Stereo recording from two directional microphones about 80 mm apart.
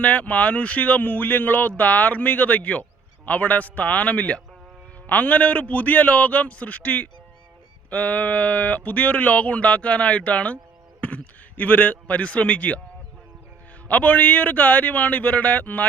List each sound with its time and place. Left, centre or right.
0.0 s a man's voice: centre
13.8 s speech: centre